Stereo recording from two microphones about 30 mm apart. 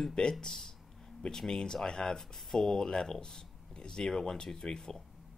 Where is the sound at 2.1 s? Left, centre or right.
Centre.